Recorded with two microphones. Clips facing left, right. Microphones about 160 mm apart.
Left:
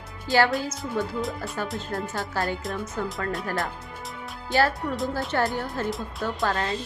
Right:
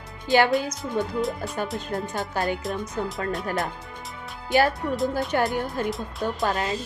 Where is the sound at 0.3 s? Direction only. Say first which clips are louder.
Right 2 dB; 20° right (ahead or behind).